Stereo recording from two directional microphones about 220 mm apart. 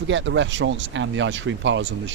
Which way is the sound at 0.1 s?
55° right (ahead or behind).